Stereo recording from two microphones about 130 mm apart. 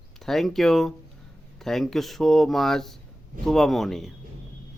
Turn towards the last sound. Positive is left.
turn(degrees=0)  # may be behind; listen again after turning